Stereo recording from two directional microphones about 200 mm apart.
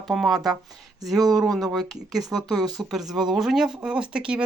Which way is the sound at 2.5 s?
20° right (ahead or behind).